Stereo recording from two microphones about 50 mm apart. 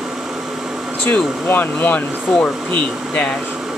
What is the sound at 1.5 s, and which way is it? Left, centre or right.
Speech, left.